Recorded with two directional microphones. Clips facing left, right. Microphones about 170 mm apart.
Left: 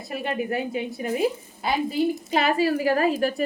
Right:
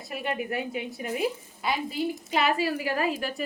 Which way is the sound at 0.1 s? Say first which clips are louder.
Left 4 dB; 30° left (ahead or behind).